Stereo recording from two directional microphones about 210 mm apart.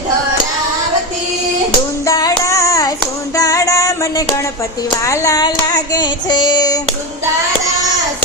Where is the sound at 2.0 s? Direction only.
15° left (ahead or behind).